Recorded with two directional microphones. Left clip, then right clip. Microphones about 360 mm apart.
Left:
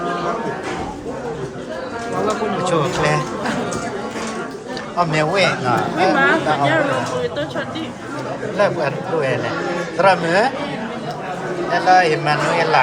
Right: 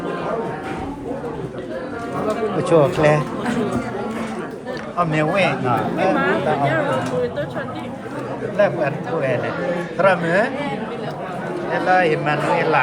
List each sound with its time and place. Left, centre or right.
2.6 s speech: centre
4.9 s speech: centre
6.1 s speech: left
8.5 s a man's voice: centre
11.7 s speech: centre